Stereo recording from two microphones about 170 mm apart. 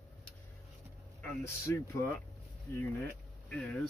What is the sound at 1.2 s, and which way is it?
Speech, 15° left (ahead or behind).